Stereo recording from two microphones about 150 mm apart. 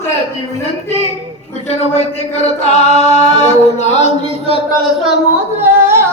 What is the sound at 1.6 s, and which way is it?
Chant, 45° left (ahead or behind).